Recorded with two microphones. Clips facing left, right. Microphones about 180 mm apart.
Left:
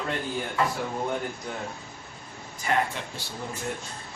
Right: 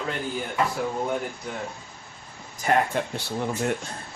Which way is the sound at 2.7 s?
40° right (ahead or behind).